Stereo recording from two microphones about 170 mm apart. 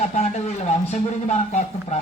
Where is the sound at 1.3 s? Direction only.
40° left (ahead or behind).